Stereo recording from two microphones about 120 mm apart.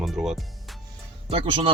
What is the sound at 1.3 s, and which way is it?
Speech, 55° right (ahead or behind).